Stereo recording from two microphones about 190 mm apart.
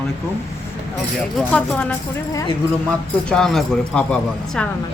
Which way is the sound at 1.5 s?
5° left (ahead or behind).